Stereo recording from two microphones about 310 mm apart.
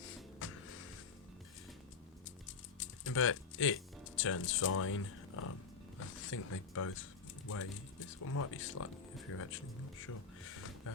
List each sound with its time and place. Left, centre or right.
0.4 s music: left
2.7 s music: left
4.2 s speech: left
10.5 s music: left